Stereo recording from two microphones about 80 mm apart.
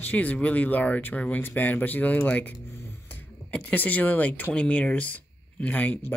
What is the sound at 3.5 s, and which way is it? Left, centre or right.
Speech, left.